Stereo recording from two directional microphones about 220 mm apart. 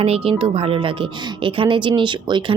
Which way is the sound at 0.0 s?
25° right (ahead or behind).